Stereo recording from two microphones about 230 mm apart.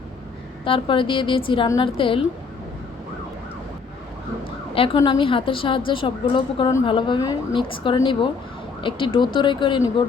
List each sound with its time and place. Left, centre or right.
0.6 s a woman's voice: left
4.7 s a woman's voice: left